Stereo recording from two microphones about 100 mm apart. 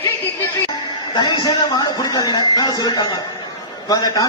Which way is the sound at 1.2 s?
45° left (ahead or behind).